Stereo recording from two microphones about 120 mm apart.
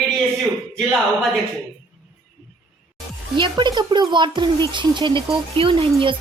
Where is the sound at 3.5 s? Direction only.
40° right (ahead or behind).